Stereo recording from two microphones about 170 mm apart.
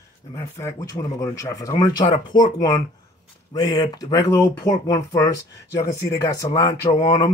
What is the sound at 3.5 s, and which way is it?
Speech, 20° left (ahead or behind).